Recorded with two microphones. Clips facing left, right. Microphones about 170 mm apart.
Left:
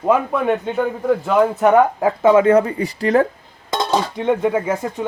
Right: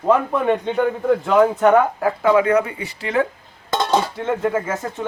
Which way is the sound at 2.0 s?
20° left (ahead or behind).